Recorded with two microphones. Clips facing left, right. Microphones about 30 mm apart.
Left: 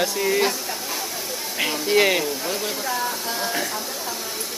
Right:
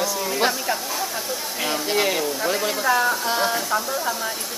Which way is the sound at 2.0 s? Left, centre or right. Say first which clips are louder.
Left 4 dB; centre.